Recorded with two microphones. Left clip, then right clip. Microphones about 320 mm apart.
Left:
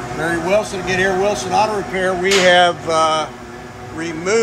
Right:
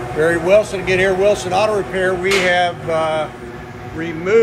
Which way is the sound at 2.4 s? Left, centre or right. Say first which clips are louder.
Left 6 dB; left.